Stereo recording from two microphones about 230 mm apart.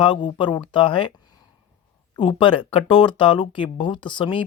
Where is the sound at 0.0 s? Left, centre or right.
Left.